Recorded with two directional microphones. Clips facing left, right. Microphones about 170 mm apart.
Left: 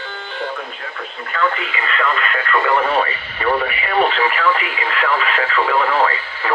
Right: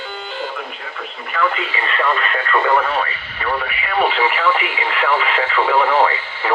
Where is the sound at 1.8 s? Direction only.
25° right (ahead or behind).